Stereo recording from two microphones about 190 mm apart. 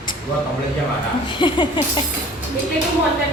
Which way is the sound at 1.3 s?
25° left (ahead or behind).